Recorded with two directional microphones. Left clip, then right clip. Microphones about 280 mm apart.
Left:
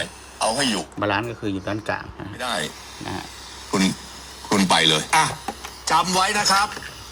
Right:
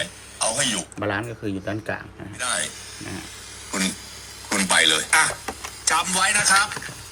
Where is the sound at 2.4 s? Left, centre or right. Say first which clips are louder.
Left 1 dB; left.